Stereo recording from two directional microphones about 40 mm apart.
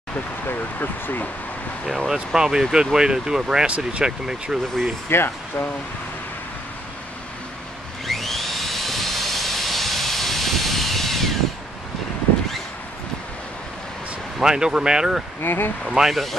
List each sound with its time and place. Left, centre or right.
0.5 s speech: left
1.9 s speech: centre
3.6 s speech: right
4.0 s speech: centre
5.1 s speech: left
8.1 s vehicle: centre
14.4 s speech: centre
15.4 s speech: left
15.8 s speech: centre